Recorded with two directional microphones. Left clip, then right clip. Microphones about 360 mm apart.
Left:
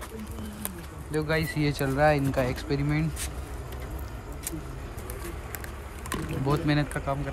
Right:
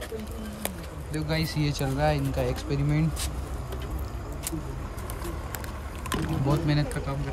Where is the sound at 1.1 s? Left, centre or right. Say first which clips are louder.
Left 3 dB; centre.